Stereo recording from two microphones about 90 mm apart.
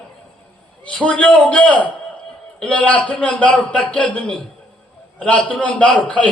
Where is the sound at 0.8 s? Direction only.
15° left (ahead or behind).